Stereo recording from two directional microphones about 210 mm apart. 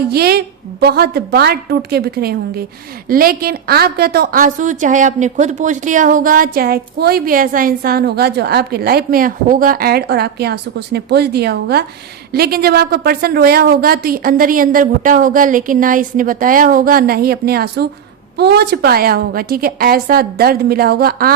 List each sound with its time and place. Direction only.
0.1 s a woman's voice: 50° right (ahead or behind)